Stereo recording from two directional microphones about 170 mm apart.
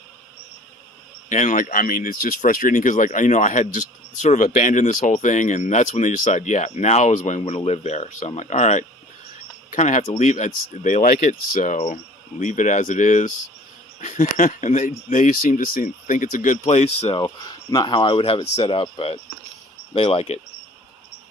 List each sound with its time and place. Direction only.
1.3 s speech: 45° left (ahead or behind)
17.2 s speech: 25° left (ahead or behind)